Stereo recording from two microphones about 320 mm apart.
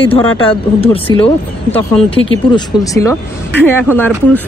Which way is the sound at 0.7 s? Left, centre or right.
Centre.